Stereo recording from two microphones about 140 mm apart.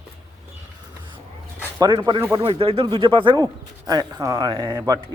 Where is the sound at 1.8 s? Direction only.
30° right (ahead or behind).